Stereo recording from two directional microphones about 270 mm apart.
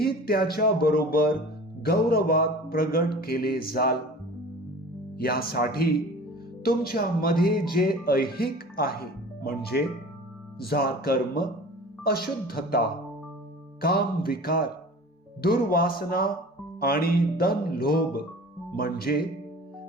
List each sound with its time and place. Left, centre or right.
0.0 s speech: left
5.1 s speech: left
10.6 s speech: left